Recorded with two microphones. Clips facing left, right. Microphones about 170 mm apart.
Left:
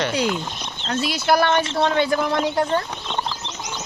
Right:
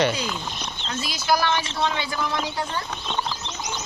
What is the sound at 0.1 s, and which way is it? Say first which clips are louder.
A man's voice: left 6 dB; 70° left (ahead or behind).